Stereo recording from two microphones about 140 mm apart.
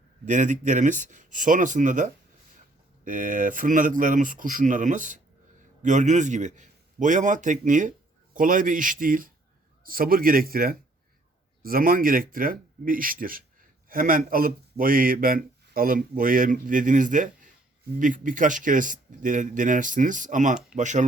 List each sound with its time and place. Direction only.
0.3 s a man's voice: 65° right (ahead or behind)